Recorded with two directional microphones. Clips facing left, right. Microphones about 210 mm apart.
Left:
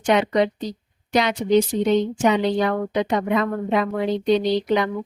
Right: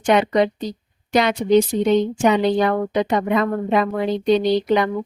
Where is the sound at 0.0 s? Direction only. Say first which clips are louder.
Right 2 dB; 50° right (ahead or behind).